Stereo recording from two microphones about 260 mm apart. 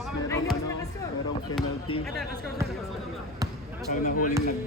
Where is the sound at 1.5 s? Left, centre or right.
Centre.